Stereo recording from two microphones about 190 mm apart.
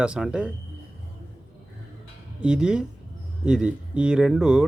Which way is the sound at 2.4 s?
5° right (ahead or behind).